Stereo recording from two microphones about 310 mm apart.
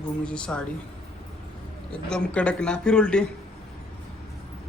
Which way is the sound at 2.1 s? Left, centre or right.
Centre.